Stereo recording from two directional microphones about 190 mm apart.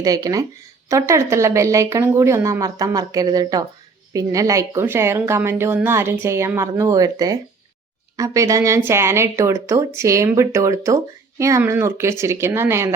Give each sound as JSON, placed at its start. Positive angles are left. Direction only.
{"t": 0.0, "sound": "speech", "side_deg": -20}